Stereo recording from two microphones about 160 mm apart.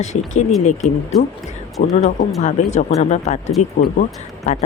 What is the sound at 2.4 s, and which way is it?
Speech, 45° left (ahead or behind).